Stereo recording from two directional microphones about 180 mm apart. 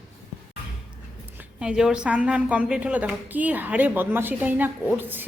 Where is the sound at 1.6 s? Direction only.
5° right (ahead or behind).